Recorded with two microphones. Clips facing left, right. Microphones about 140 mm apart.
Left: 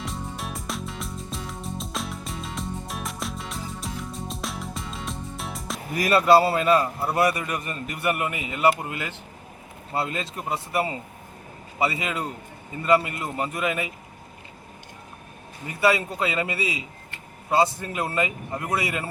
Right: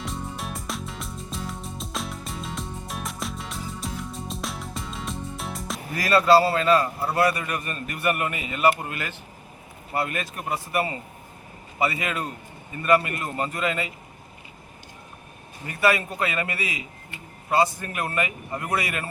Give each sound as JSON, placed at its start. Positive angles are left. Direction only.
{"t": 0.0, "sound": "music", "side_deg": 0}
{"t": 5.9, "sound": "a man's voice", "side_deg": 20}
{"t": 15.6, "sound": "a man's voice", "side_deg": 20}